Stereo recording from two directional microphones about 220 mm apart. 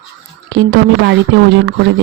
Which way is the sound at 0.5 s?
55° right (ahead or behind).